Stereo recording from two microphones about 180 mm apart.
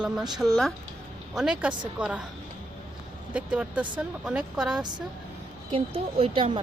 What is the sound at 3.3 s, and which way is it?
Speech, 5° right (ahead or behind).